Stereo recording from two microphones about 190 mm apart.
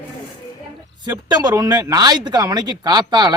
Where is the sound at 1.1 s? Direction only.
20° right (ahead or behind).